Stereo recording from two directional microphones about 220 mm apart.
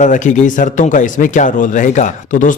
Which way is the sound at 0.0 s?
35° left (ahead or behind).